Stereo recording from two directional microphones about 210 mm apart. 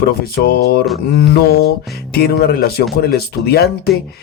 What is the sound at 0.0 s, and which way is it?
Speech, 45° left (ahead or behind).